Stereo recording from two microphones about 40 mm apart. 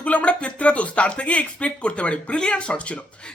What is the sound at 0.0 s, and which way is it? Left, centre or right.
Speech, left.